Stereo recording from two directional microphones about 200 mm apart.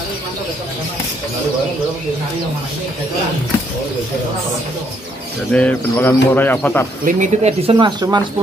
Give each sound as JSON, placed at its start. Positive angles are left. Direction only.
{"t": 5.5, "sound": "speech", "side_deg": 5}
{"t": 7.1, "sound": "speech", "side_deg": -35}
{"t": 7.7, "sound": "speech", "side_deg": -20}